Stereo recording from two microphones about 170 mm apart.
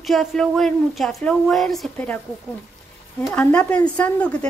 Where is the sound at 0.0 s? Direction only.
Centre (ahead or behind).